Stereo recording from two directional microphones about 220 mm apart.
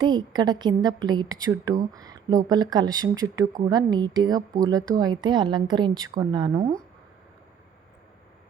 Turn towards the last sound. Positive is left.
turn(degrees=-15)  # may be behind; listen again after turning